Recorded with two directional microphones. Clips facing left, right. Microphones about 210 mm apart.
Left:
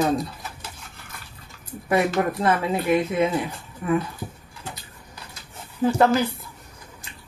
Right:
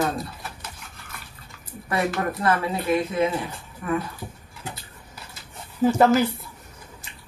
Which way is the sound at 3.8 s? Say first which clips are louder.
Left 3 dB; 20° left (ahead or behind).